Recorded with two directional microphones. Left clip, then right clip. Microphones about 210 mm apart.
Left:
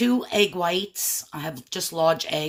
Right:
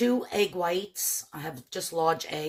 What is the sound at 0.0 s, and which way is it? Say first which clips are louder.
Speech: left 4 dB; 20° left (ahead or behind).